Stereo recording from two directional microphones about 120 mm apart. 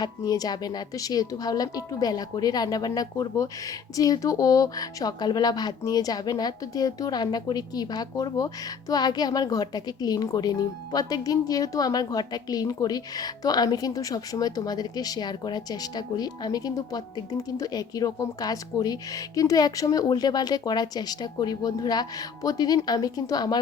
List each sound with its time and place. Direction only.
0.0 s speech: 35° left (ahead or behind)